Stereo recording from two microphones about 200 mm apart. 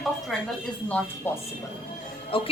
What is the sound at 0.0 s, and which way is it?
A woman's voice, centre (ahead or behind).